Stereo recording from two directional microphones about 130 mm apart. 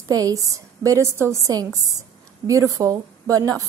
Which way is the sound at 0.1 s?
25° right (ahead or behind).